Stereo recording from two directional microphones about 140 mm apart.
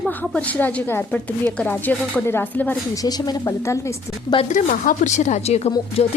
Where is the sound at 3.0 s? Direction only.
30° left (ahead or behind).